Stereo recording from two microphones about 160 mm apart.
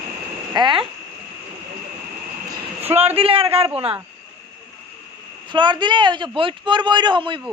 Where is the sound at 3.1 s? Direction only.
35° right (ahead or behind).